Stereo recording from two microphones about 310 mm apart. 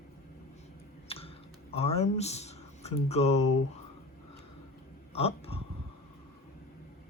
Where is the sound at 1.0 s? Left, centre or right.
Centre.